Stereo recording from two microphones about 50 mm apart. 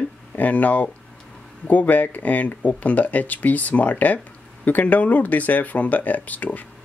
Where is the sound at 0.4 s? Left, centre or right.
Left.